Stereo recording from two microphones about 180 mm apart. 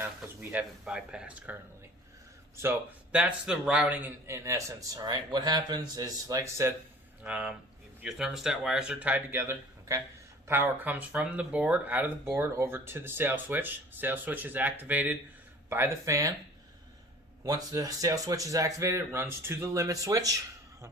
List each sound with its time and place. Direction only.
0.0 s speech: 10° right (ahead or behind)
2.6 s speech: 10° right (ahead or behind)
7.3 s speech: 5° right (ahead or behind)
17.4 s speech: 20° right (ahead or behind)